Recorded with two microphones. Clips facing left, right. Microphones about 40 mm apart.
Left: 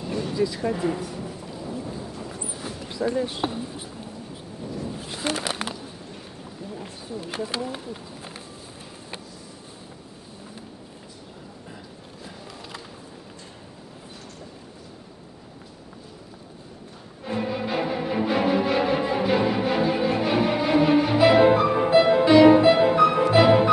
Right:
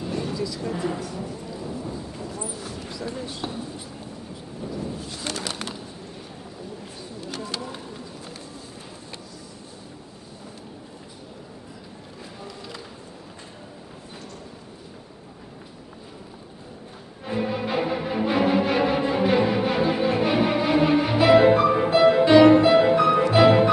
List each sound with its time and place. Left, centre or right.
0.3 s speech: left
0.7 s speech: centre
1.1 s thunder: centre
2.5 s a sound: left
3.3 s speech: left
4.6 s a sound: centre
5.0 s bird: left
6.8 s speech: left
12.4 s music: centre
17.2 s music: centre